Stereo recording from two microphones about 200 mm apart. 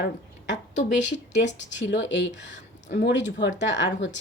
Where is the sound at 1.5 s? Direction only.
60° left (ahead or behind).